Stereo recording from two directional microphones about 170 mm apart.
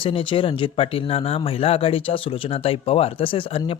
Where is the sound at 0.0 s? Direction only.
30° left (ahead or behind).